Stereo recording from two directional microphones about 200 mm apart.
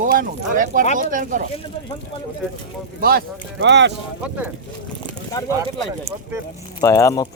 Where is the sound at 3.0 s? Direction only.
50° right (ahead or behind).